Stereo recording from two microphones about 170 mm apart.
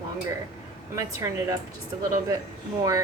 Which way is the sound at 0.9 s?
20° right (ahead or behind).